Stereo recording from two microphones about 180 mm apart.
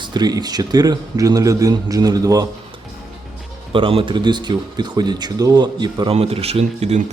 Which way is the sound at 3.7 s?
30° right (ahead or behind).